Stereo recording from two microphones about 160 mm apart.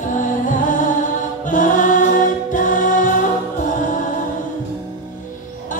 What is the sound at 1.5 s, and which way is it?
Choir, 55° left (ahead or behind).